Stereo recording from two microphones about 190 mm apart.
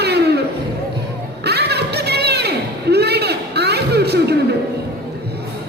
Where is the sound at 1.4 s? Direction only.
60° right (ahead or behind).